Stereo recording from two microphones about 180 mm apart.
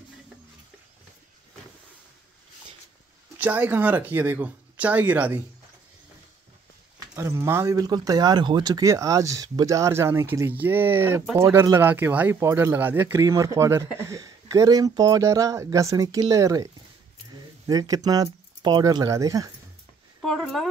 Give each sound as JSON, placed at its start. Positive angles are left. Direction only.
{"t": 3.3, "sound": "speech", "side_deg": -10}
{"t": 7.2, "sound": "speech", "side_deg": -15}
{"t": 17.6, "sound": "speech", "side_deg": -20}
{"t": 20.2, "sound": "speech", "side_deg": 0}